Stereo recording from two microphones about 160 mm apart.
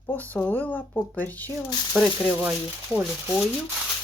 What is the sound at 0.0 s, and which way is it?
Speech, 10° left (ahead or behind).